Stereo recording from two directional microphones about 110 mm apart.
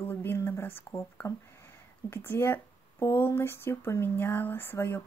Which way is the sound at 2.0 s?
20° left (ahead or behind).